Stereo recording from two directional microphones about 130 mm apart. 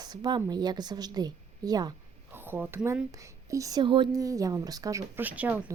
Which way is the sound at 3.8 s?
40° right (ahead or behind).